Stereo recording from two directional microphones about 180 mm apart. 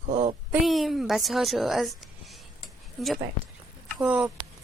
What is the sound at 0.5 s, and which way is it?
A woman's voice, centre (ahead or behind).